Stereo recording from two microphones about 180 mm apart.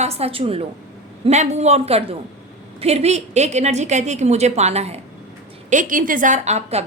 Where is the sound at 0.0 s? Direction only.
35° right (ahead or behind).